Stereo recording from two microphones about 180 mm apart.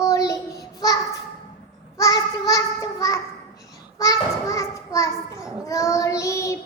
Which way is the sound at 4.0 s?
20° left (ahead or behind).